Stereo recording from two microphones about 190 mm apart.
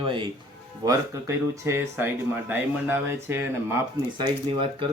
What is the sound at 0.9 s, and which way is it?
Speech, 15° right (ahead or behind).